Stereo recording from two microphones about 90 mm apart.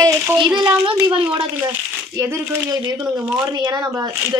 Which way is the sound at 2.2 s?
30° right (ahead or behind).